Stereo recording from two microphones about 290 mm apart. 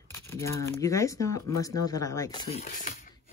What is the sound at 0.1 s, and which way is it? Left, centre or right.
Speech, centre.